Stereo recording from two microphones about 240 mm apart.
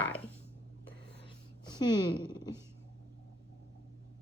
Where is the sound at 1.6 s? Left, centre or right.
Centre.